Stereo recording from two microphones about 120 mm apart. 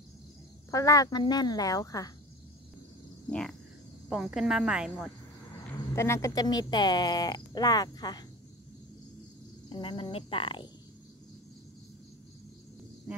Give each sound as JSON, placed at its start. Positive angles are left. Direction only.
{"t": 0.7, "sound": "speech", "side_deg": 30}
{"t": 3.3, "sound": "speech", "side_deg": 10}
{"t": 4.1, "sound": "speech", "side_deg": -5}
{"t": 5.9, "sound": "speech", "side_deg": 25}
{"t": 9.7, "sound": "speech", "side_deg": 45}